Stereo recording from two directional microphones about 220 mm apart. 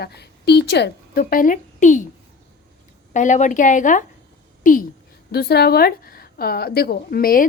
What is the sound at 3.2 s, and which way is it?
A woman's voice, 35° left (ahead or behind).